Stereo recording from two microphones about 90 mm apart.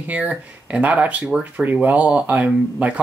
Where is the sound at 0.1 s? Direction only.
15° right (ahead or behind).